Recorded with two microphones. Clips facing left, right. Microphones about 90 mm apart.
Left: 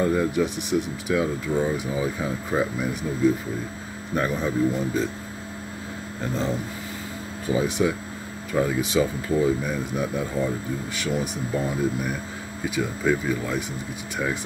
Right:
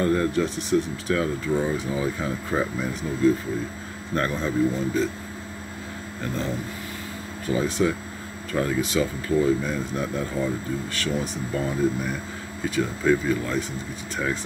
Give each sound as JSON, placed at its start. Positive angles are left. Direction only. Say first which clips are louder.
{"t": 0.0, "sound": "speech", "louder": "even", "side_deg": 5}
{"t": 6.2, "sound": "speech", "louder": "left 2 dB", "side_deg": 15}